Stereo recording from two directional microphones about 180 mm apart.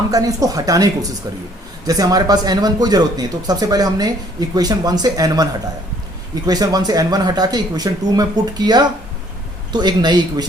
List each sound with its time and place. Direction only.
0.1 s speech: 20° right (ahead or behind)
1.9 s speech: 20° right (ahead or behind)